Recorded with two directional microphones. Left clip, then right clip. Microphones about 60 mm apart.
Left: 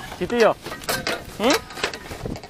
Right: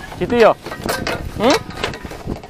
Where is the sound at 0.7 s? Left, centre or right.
Centre.